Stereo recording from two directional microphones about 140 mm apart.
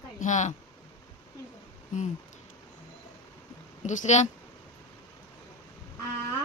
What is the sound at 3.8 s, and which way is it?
Speech, 60° left (ahead or behind).